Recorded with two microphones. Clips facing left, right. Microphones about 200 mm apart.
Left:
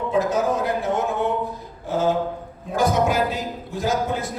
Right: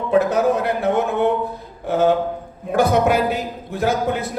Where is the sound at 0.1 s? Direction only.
65° right (ahead or behind).